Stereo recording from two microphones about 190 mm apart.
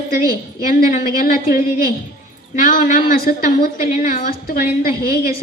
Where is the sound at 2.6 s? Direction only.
45° left (ahead or behind).